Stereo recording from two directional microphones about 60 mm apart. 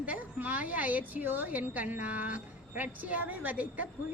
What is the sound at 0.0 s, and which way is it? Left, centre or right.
A woman's voice, right.